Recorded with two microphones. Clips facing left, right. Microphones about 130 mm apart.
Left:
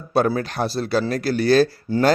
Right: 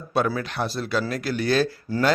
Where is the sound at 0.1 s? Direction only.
40° left (ahead or behind).